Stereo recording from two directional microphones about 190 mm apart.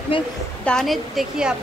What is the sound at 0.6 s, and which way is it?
Speech, centre (ahead or behind).